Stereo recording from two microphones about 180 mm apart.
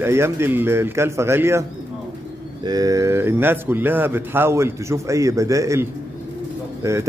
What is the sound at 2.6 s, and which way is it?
A man's voice, 20° right (ahead or behind).